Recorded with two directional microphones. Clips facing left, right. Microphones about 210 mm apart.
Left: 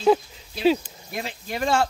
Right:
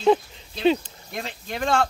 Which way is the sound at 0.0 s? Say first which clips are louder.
Even; 5° left (ahead or behind).